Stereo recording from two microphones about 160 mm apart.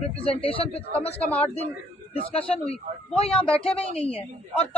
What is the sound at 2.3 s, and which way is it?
Speech, 40° left (ahead or behind).